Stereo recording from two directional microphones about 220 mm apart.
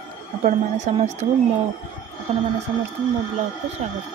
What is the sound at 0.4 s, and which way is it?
Speech, 35° right (ahead or behind).